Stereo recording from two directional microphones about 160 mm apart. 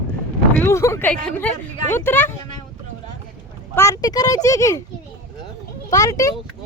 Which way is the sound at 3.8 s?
20° left (ahead or behind).